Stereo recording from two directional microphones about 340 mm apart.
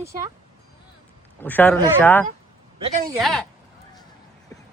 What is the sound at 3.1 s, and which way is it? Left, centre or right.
Speech, centre.